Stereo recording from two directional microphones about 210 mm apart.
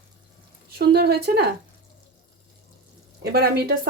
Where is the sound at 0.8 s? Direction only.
50° right (ahead or behind).